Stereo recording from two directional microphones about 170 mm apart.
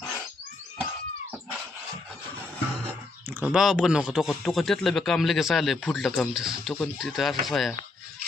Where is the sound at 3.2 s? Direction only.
10° right (ahead or behind).